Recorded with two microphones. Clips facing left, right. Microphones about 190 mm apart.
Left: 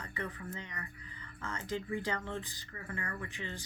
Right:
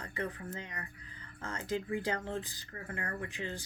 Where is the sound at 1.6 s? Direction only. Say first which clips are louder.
Right 2 dB; 5° right (ahead or behind).